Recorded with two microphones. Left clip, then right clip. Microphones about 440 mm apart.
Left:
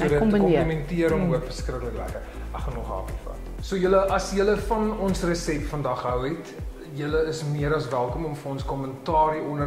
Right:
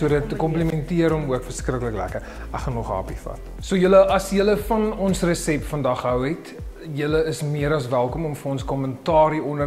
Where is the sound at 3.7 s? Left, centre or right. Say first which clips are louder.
Right 6 dB; right.